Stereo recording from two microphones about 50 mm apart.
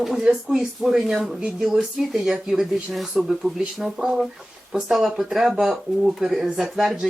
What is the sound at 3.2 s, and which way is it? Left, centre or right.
Speech, centre.